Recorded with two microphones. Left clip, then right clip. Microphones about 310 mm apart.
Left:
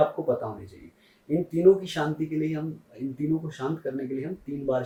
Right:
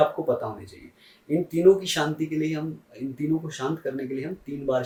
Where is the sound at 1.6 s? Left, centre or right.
Centre.